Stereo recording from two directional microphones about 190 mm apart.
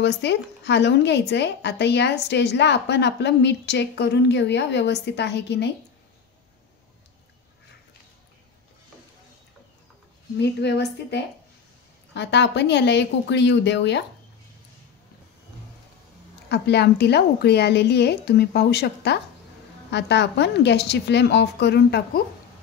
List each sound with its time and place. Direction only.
0.0 s speech: 65° left (ahead or behind)
10.4 s a woman's voice: 65° left (ahead or behind)
16.4 s speech: 60° left (ahead or behind)